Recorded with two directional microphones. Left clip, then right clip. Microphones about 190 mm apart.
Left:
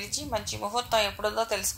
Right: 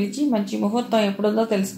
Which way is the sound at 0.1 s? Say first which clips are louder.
Right 8 dB; 35° left (ahead or behind).